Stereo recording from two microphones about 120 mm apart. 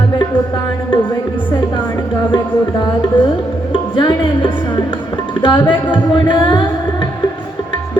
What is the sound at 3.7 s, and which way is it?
Music, 40° left (ahead or behind).